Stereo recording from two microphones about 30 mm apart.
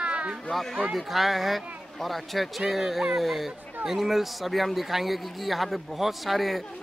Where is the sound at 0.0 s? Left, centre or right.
Right.